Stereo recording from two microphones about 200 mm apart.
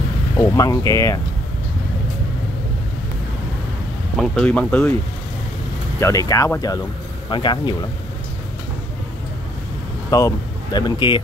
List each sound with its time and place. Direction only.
0.4 s speech: 15° left (ahead or behind)
4.2 s speech: 5° left (ahead or behind)
5.9 s speech: 15° left (ahead or behind)
10.1 s speech: 20° left (ahead or behind)